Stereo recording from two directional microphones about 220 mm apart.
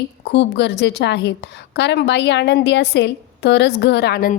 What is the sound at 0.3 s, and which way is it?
A woman's voice, 55° left (ahead or behind).